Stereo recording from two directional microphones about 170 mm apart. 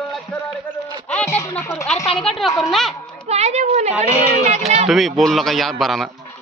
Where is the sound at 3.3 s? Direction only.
40° right (ahead or behind).